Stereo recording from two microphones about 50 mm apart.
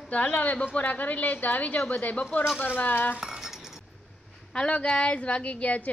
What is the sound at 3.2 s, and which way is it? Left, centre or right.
Cutlery, centre.